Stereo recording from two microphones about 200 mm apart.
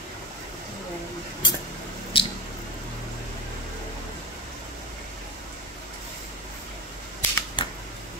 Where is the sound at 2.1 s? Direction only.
25° left (ahead or behind).